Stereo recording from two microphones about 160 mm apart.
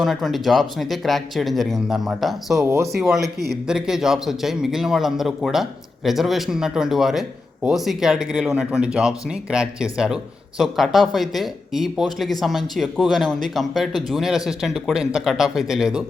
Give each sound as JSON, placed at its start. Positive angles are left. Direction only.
{"t": 0.0, "sound": "speech", "side_deg": 0}
{"t": 2.6, "sound": "speech", "side_deg": -20}
{"t": 3.0, "sound": "speech", "side_deg": 0}